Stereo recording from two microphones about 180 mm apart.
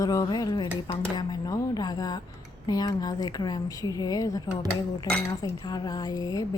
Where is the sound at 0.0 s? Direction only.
20° left (ahead or behind).